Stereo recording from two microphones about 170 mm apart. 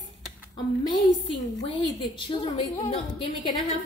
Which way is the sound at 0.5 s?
25° left (ahead or behind).